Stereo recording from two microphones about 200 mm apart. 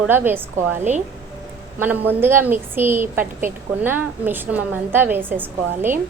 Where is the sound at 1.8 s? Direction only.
10° right (ahead or behind).